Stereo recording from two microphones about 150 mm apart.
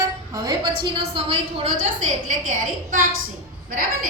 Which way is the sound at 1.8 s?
55° right (ahead or behind).